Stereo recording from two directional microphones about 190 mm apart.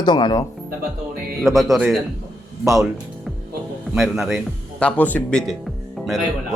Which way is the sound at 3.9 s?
Centre (ahead or behind).